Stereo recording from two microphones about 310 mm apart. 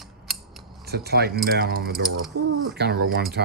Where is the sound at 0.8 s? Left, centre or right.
Right.